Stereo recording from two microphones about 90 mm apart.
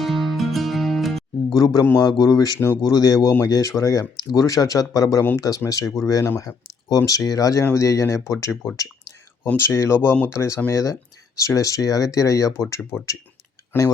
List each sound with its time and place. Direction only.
0.0 s music: centre (ahead or behind)
1.5 s speech: 45° left (ahead or behind)
8.7 s a sound: 40° left (ahead or behind)
9.6 s speech: 30° left (ahead or behind)
13.7 s speech: 20° left (ahead or behind)